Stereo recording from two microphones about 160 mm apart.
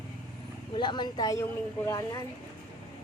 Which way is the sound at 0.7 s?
30° left (ahead or behind).